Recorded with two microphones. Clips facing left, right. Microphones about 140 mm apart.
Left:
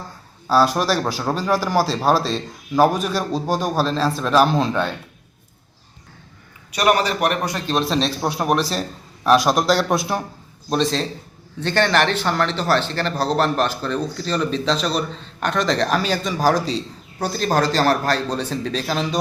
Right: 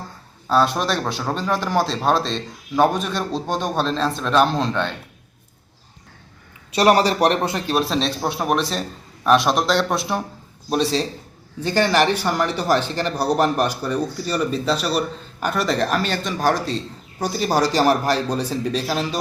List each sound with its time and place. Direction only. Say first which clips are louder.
0.4 s speech: left 2 dB; 5° left (ahead or behind)
6.7 s a man's voice: right 3 dB; 30° right (ahead or behind)
7.5 s speech: even; 5° right (ahead or behind)